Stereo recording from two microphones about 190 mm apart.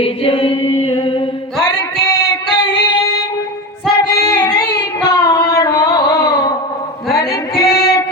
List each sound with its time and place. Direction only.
0.0 s chant: 30° left (ahead or behind)
4.0 s female singing: 20° left (ahead or behind)
4.7 s a sound: 20° left (ahead or behind)
7.1 s female singing: 20° left (ahead or behind)